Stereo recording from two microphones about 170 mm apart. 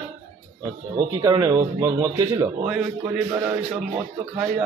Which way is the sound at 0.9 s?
20° right (ahead or behind).